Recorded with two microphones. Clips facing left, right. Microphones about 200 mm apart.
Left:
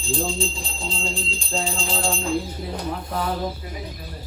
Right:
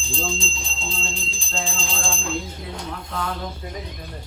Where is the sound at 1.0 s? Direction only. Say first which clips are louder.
Left 4 dB; 10° left (ahead or behind).